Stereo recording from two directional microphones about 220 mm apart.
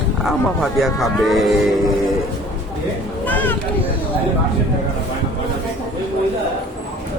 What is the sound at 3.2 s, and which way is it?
Speech, 10° left (ahead or behind).